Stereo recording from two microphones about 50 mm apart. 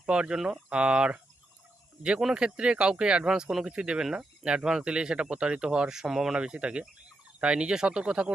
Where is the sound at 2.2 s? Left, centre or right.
Centre.